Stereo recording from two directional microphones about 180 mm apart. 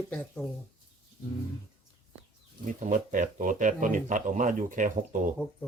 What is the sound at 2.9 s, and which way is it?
Speech, 45° right (ahead or behind).